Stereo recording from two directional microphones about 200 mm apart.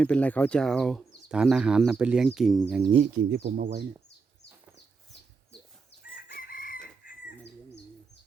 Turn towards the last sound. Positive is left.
turn(degrees=50)  # may be behind; listen again after turning